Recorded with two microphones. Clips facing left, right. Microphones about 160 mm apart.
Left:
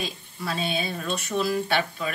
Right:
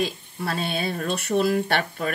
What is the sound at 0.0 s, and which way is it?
Speech, 60° right (ahead or behind).